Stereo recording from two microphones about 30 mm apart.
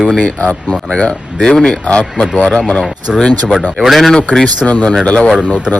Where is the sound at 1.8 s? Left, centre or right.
Left.